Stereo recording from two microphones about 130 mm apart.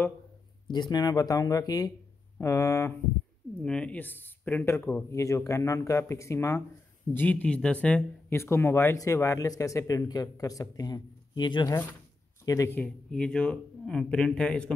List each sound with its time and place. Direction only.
0.7 s speech: 35° left (ahead or behind)
3.5 s speech: 10° left (ahead or behind)
8.3 s a man's voice: 20° left (ahead or behind)
12.7 s speech: 5° left (ahead or behind)